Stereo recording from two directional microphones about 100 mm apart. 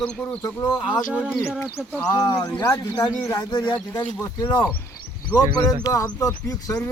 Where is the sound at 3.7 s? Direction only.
15° left (ahead or behind).